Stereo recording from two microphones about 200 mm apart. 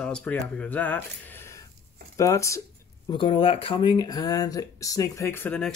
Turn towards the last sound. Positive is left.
turn(degrees=10)  # may be behind; listen again after turning